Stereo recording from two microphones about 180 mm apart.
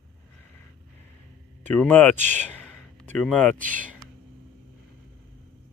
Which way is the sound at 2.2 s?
40° right (ahead or behind).